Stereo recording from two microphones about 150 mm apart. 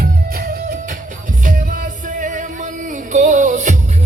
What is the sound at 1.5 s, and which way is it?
Music, 65° right (ahead or behind).